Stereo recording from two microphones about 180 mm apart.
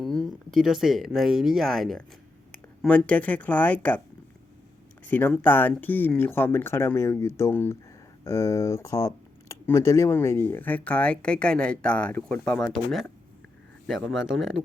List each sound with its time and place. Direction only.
0.0 s a sound: centre (ahead or behind)
0.5 s speech: centre (ahead or behind)
5.0 s speech: 10° left (ahead or behind)
14.3 s speech: 90° right